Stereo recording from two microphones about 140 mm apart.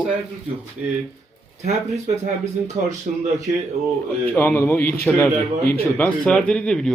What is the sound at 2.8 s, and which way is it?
Speech, 60° right (ahead or behind).